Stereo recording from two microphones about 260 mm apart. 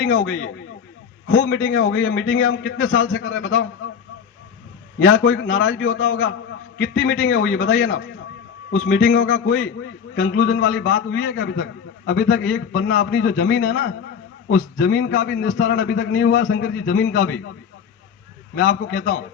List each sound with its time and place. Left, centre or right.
0.3 s a man's voice: left
4.9 s a man's voice: left
18.5 s a man's voice: left